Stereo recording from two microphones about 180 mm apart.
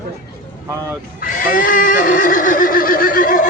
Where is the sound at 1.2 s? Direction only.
50° left (ahead or behind).